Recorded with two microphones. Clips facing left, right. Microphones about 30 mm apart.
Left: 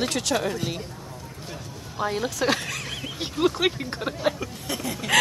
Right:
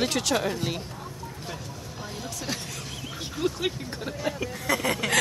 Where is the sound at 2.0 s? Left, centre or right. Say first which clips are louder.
Left 12 dB; left.